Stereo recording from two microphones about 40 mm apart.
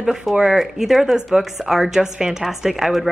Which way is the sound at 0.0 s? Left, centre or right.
Centre.